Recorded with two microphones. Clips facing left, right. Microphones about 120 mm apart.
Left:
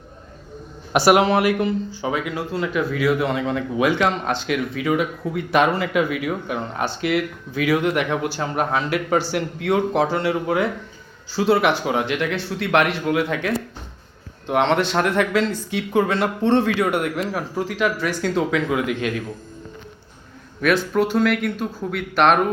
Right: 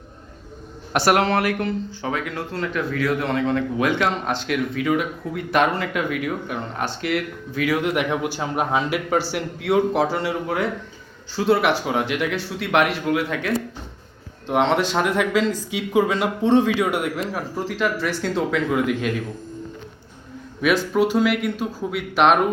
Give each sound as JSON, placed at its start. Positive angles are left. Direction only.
{"t": 0.9, "sound": "speech", "side_deg": 10}
{"t": 20.9, "sound": "speech", "side_deg": -5}